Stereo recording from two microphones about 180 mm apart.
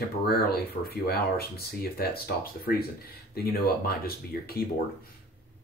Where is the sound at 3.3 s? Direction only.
60° left (ahead or behind).